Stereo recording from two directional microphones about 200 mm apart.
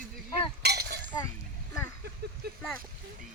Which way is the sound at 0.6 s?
55° right (ahead or behind).